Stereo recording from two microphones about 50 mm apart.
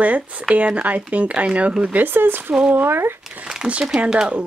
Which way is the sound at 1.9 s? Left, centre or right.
Right.